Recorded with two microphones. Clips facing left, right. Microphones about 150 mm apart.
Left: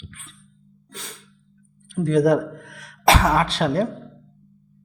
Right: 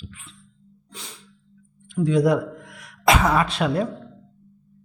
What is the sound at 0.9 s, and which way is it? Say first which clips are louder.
Sneeze: left 3 dB; 45° left (ahead or behind).